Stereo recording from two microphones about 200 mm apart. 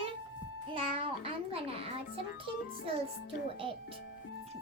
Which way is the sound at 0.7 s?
25° right (ahead or behind).